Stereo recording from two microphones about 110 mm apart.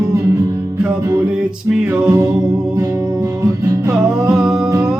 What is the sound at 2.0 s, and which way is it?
Music, 25° right (ahead or behind).